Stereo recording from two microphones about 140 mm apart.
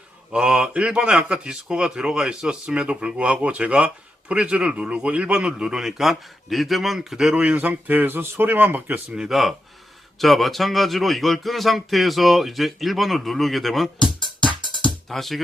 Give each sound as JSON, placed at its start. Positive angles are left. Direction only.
{"t": 0.3, "sound": "speech", "side_deg": -5}
{"t": 14.2, "sound": "music", "side_deg": -30}
{"t": 15.1, "sound": "speech", "side_deg": 0}